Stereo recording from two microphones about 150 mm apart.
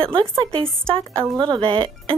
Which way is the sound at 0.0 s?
35° right (ahead or behind).